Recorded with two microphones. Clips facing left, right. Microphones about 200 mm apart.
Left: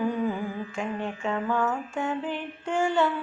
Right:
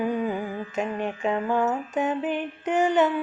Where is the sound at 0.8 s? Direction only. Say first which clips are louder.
Right 5 dB; 15° right (ahead or behind).